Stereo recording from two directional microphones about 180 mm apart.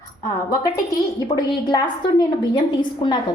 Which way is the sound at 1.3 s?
25° left (ahead or behind).